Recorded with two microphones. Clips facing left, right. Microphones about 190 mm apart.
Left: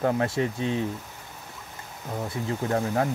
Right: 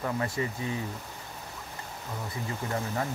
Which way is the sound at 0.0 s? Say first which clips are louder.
Left 6 dB; 70° left (ahead or behind).